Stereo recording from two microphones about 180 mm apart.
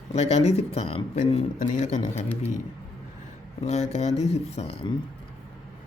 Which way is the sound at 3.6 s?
35° left (ahead or behind).